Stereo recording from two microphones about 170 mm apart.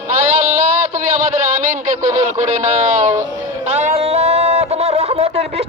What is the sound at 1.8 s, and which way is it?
Speech, 45° right (ahead or behind).